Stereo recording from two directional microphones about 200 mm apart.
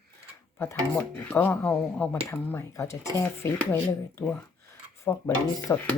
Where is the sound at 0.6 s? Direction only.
10° left (ahead or behind).